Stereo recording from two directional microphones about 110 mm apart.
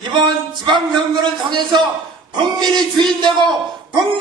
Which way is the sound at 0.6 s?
45° right (ahead or behind).